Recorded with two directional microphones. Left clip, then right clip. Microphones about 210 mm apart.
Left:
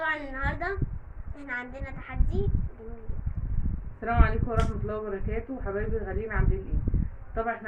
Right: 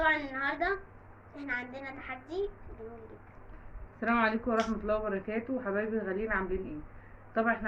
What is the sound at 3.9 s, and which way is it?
A man's voice, 50° right (ahead or behind).